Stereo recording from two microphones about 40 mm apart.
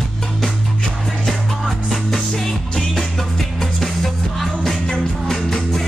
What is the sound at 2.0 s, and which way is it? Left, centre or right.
Music, centre.